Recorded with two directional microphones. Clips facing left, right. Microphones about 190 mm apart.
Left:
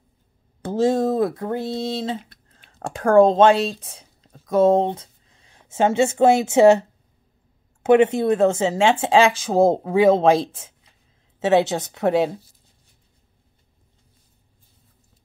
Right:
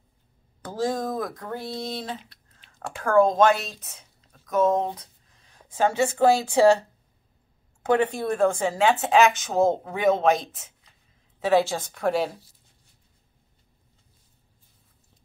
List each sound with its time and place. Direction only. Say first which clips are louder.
0.6 s speech: left 8 dB; 25° left (ahead or behind)
2.7 s speech: left 5 dB; 40° left (ahead or behind); by 6.8 s 20° left (ahead or behind)
7.8 s speech: left 7 dB; 25° left (ahead or behind)